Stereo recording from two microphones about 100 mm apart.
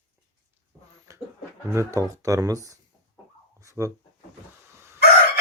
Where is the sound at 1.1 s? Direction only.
30° right (ahead or behind).